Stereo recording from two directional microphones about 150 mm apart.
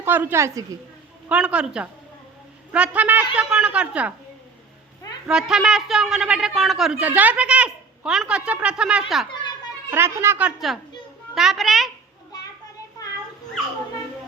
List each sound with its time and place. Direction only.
0.0 s a woman's voice: 15° right (ahead or behind)
1.3 s a woman's voice: 10° right (ahead or behind)
5.3 s a man's voice: 5° right (ahead or behind)
9.9 s a woman's voice: 15° right (ahead or behind); by 11.9 s centre (ahead or behind)
13.0 s dog: 20° left (ahead or behind)